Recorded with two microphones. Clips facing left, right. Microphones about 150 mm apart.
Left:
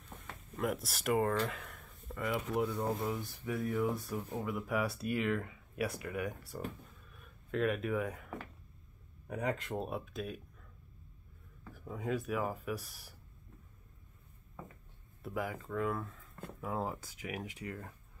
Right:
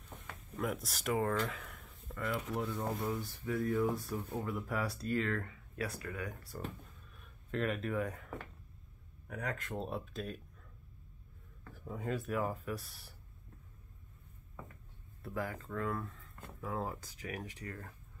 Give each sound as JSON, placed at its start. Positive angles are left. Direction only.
{"t": 0.6, "sound": "speech", "side_deg": 0}
{"t": 1.5, "sound": "a sound", "side_deg": 0}
{"t": 2.2, "sound": "speech", "side_deg": 15}
{"t": 2.7, "sound": "speech", "side_deg": 0}
{"t": 3.1, "sound": "speech", "side_deg": 20}
{"t": 3.5, "sound": "speech", "side_deg": 5}
{"t": 7.5, "sound": "speech", "side_deg": 5}
{"t": 9.3, "sound": "speech", "side_deg": 20}
{"t": 11.9, "sound": "speech", "side_deg": 0}
{"t": 15.2, "sound": "speech", "side_deg": 15}